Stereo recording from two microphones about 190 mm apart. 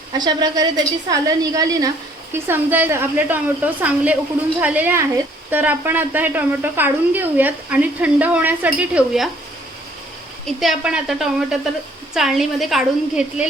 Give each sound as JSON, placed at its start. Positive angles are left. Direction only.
{"t": 0.2, "sound": "a woman's voice", "side_deg": -20}
{"t": 10.4, "sound": "a woman's voice", "side_deg": 0}